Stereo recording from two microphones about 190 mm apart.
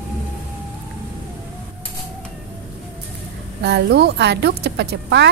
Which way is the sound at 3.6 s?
60° right (ahead or behind).